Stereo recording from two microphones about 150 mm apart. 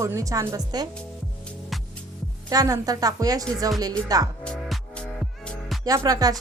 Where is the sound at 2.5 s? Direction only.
25° right (ahead or behind).